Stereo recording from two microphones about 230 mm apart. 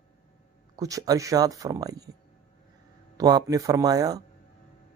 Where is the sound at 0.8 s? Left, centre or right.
Centre.